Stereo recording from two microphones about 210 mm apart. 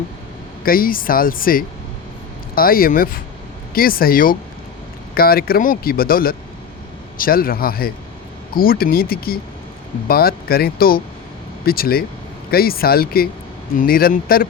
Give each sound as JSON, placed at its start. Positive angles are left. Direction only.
{"t": 0.6, "sound": "speech", "side_deg": 45}